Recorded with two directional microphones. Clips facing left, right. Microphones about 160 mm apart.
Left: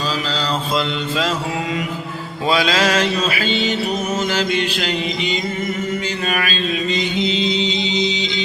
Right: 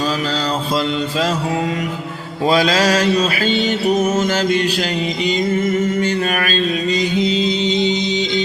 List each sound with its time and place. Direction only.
2.5 s mantra: 40° right (ahead or behind)
7.0 s music: 40° right (ahead or behind)